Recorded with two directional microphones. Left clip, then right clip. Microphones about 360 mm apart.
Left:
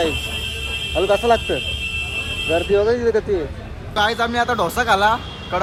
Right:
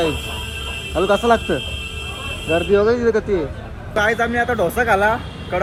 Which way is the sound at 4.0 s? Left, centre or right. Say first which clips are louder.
Right 1 dB; centre.